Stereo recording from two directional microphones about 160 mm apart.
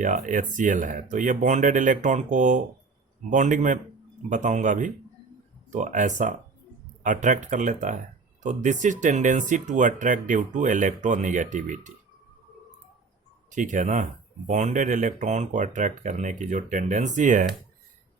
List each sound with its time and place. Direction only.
0.0 s speech: 50° right (ahead or behind)
13.5 s speech: 50° right (ahead or behind)